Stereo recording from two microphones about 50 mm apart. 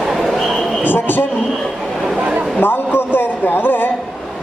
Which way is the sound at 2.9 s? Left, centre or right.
Left.